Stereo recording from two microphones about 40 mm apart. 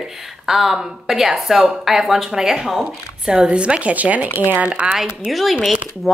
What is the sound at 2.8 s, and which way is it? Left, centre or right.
Speech, centre.